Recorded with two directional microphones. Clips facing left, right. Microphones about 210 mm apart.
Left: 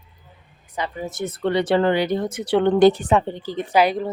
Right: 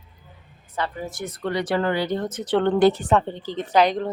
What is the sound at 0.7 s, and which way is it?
A woman's voice, 15° left (ahead or behind).